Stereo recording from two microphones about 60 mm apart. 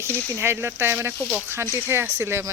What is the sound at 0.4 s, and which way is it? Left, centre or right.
Speech, right.